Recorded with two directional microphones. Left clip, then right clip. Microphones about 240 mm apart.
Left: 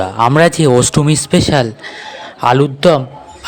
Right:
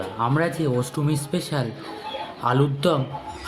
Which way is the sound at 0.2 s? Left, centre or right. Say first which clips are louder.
Left 13 dB; left.